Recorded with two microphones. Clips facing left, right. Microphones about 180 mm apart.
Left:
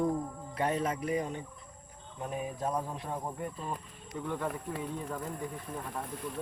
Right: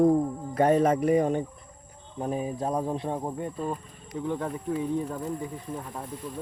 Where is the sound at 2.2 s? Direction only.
35° right (ahead or behind).